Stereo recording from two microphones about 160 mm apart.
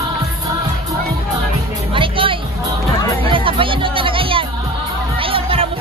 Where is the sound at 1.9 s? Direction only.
35° right (ahead or behind).